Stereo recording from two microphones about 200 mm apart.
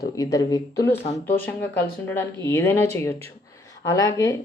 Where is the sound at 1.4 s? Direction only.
10° left (ahead or behind).